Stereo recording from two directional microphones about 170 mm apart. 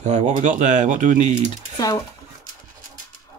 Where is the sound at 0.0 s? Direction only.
45° right (ahead or behind).